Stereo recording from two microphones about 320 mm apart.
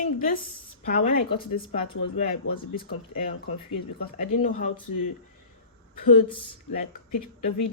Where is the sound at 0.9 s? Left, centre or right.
Left.